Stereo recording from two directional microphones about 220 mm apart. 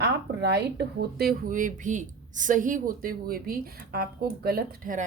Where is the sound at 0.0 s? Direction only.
50° right (ahead or behind).